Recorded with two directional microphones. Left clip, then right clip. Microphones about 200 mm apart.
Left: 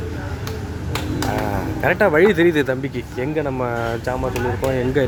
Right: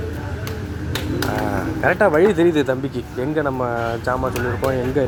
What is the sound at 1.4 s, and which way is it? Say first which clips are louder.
Speech: right 2 dB; 10° left (ahead or behind).